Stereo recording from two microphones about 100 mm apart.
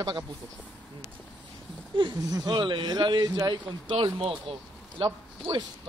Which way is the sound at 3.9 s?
65° right (ahead or behind).